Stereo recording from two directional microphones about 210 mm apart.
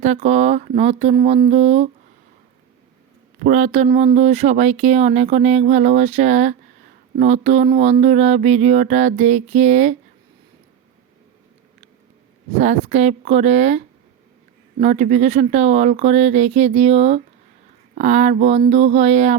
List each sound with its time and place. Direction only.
0.0 s speech: 30° right (ahead or behind)
3.4 s speech: 35° right (ahead or behind)
12.5 s speech: 35° right (ahead or behind)